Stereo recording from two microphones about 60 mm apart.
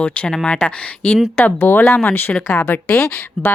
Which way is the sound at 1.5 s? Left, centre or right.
Left.